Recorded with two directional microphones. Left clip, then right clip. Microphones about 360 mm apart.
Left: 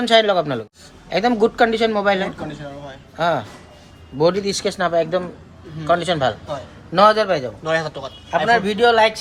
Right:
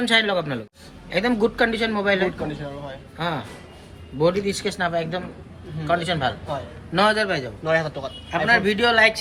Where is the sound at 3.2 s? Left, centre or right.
Left.